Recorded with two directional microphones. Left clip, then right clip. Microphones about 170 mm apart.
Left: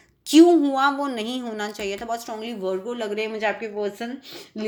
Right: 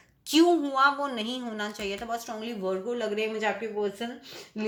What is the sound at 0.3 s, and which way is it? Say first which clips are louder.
A woman's voice: left 8 dB; 30° left (ahead or behind).